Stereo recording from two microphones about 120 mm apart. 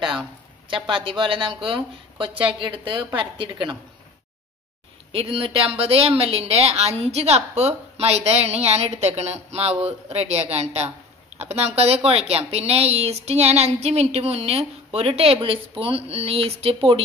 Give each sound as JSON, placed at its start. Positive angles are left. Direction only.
{"t": 0.0, "sound": "a sound", "side_deg": -5}
{"t": 0.7, "sound": "speech", "side_deg": -45}
{"t": 5.1, "sound": "speech", "side_deg": -55}